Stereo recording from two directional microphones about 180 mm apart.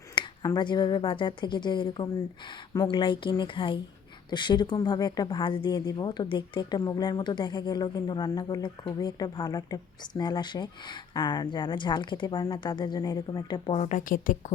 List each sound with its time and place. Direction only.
0.2 s speech: 25° left (ahead or behind)
13.8 s speech: 50° left (ahead or behind)